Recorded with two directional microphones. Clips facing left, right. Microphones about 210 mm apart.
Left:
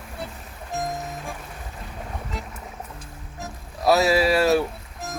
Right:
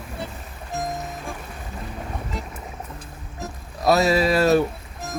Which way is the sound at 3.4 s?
Centre (ahead or behind).